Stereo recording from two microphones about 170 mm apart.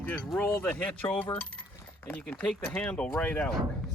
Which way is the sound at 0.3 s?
5° left (ahead or behind).